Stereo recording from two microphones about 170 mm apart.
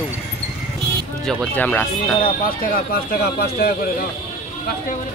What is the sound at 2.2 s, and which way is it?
Speech, 55° left (ahead or behind).